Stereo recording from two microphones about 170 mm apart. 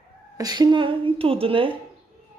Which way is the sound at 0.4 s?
25° right (ahead or behind).